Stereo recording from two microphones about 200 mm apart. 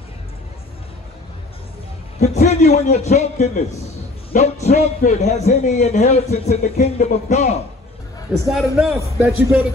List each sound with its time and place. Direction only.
2.1 s a man's voice: 35° left (ahead or behind)
8.3 s a man's voice: centre (ahead or behind)